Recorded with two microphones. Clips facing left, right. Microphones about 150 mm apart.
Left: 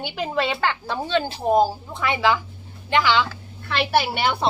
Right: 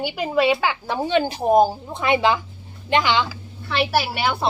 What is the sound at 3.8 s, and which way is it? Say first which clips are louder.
Speech: even; centre (ahead or behind).